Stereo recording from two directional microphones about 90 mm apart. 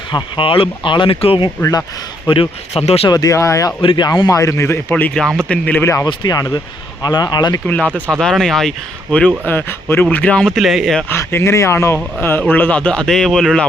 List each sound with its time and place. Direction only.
0.1 s a man's voice: 60° left (ahead or behind); by 2.9 s 90° left
3.1 s speech: 45° left (ahead or behind)
3.8 s speech: 65° left (ahead or behind)
4.3 s speech: 35° left (ahead or behind)
4.9 s speech: 20° left (ahead or behind)
5.1 s speech: 5° left (ahead or behind)
5.8 s speech: 30° left (ahead or behind)
6.2 s speech: 45° left (ahead or behind)
7.7 s speech: 15° left (ahead or behind)
9.5 s speech: 25° left (ahead or behind); by 11.0 s centre (ahead or behind)
11.1 s speech: 25° left (ahead or behind)
12.2 s speech: 20° left (ahead or behind); by 13.7 s 5° left (ahead or behind)